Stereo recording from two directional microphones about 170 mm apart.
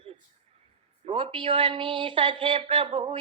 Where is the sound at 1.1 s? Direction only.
30° right (ahead or behind).